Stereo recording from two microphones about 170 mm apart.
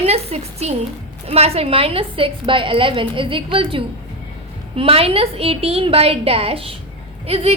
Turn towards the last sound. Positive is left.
turn(degrees=-35)  # may be behind; listen again after turning